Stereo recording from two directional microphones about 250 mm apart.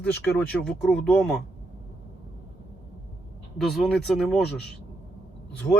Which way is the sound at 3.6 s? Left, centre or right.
Centre.